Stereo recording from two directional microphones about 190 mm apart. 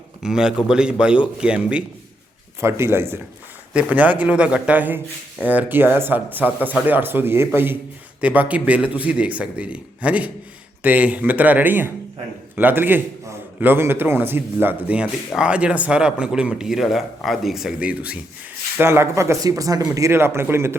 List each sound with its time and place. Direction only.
0.2 s speech: 5° right (ahead or behind)